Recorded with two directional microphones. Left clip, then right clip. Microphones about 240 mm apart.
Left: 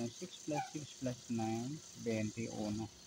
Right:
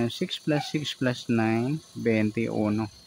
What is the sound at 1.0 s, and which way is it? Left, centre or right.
Speech, right.